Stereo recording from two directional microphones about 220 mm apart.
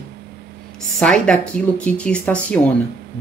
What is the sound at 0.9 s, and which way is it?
Speech, 5° left (ahead or behind).